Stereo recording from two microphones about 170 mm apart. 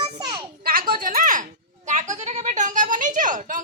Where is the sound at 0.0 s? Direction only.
25° right (ahead or behind).